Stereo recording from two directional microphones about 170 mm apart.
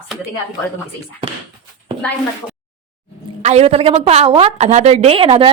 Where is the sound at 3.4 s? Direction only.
40° right (ahead or behind).